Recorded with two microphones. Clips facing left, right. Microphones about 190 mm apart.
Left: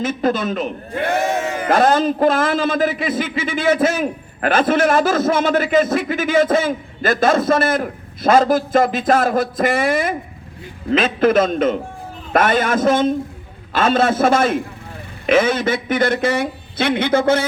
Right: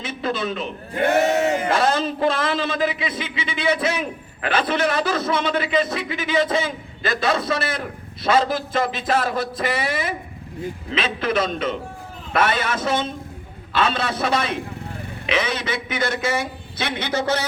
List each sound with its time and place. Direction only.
0.0 s a man's voice: 45° left (ahead or behind)